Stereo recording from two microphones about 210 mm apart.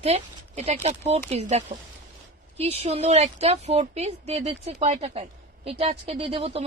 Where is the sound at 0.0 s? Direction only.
30° right (ahead or behind).